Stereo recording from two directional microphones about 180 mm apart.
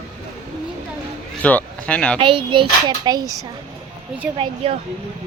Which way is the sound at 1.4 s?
10° left (ahead or behind).